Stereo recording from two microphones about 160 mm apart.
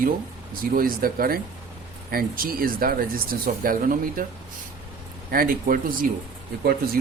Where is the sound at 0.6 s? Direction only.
65° right (ahead or behind).